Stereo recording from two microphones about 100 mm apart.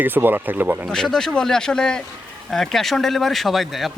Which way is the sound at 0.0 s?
20° right (ahead or behind).